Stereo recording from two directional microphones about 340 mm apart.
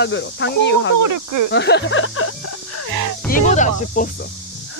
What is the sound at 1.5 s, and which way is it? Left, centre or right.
Speech, left.